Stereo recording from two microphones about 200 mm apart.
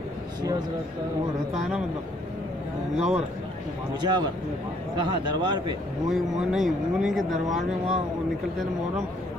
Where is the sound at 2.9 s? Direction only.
30° right (ahead or behind).